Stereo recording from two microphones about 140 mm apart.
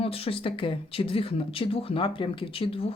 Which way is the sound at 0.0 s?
45° left (ahead or behind).